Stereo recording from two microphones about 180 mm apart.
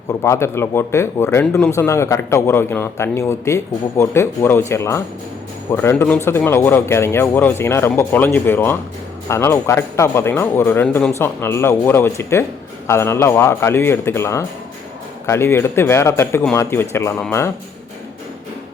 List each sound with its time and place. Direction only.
0.1 s speech: 15° left (ahead or behind)